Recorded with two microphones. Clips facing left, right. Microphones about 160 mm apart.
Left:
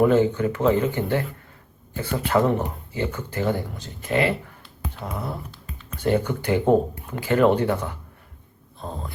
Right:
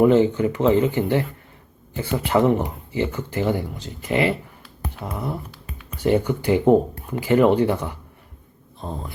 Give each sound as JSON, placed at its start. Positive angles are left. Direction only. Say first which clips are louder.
{"t": 0.0, "sound": "speech", "louder": "right 2 dB", "side_deg": -15}